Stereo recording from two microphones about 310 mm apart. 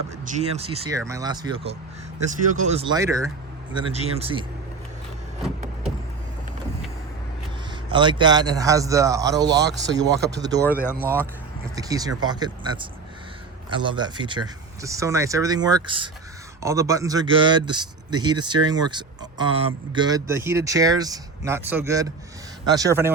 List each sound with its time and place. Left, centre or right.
0.3 s speech: centre
7.9 s speech: centre
9.6 s speech: right
11.0 s speech: centre